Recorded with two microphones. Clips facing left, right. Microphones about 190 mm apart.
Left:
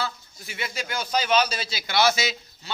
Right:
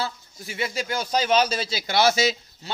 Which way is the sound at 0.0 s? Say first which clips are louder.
Right 1 dB; 35° right (ahead or behind).